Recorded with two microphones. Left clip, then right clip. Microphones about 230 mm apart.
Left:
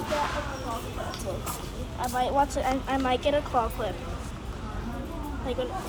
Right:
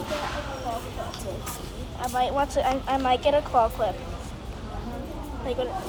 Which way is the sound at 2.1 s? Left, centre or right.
Left.